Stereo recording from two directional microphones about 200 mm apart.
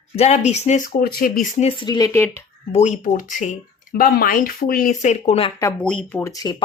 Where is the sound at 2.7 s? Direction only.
35° left (ahead or behind).